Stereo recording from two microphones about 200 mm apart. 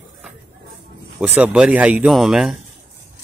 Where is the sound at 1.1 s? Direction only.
5° right (ahead or behind).